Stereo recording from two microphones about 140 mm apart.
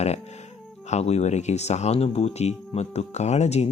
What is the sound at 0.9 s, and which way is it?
Speech, 50° left (ahead or behind).